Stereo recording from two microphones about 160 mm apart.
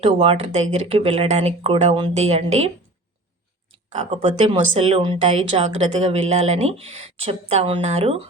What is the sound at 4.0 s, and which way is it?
Speech, 45° right (ahead or behind).